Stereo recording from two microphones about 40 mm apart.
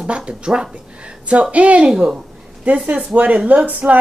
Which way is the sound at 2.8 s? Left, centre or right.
Right.